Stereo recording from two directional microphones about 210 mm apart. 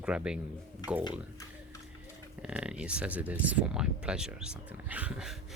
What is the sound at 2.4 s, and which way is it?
Speech, 5° right (ahead or behind).